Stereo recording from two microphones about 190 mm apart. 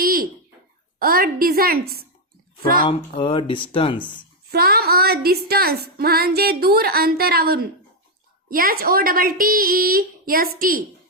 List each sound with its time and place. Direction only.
0.0 s a sound: 50° right (ahead or behind)
0.9 s speech: 50° right (ahead or behind)
2.8 s speech: 25° left (ahead or behind)
4.5 s speech: 55° right (ahead or behind)